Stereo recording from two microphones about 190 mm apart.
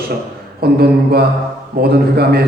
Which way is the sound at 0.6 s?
55° right (ahead or behind).